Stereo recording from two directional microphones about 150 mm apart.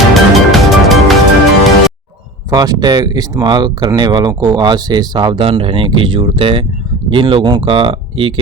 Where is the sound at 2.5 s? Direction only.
25° right (ahead or behind).